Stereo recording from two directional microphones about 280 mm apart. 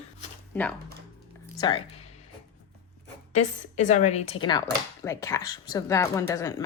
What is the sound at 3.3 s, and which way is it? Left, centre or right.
Speech, left.